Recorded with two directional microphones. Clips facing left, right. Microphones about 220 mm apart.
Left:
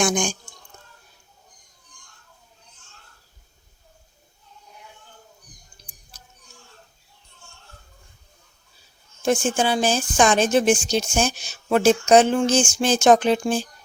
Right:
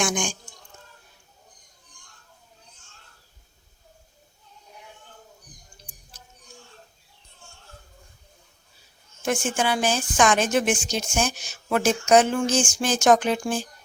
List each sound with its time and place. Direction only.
0.0 s speech: 40° left (ahead or behind)
9.2 s a woman's voice: 30° left (ahead or behind)